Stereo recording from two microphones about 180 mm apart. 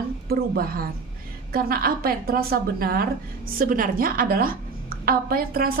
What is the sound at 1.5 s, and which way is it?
A woman's voice, 55° right (ahead or behind).